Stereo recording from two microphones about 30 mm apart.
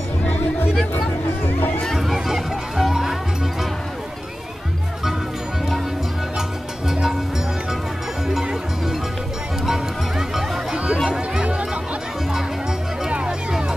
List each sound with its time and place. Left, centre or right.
2.2 s music: centre
6.9 s music: centre
9.7 s music: centre
13.5 s music: right